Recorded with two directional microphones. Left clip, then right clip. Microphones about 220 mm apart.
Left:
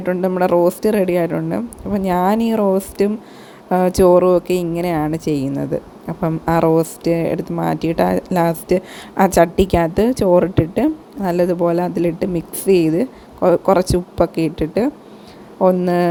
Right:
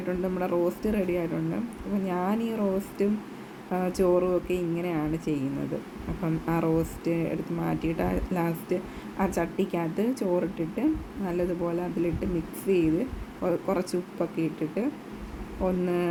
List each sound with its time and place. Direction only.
0.1 s speech: 35° left (ahead or behind)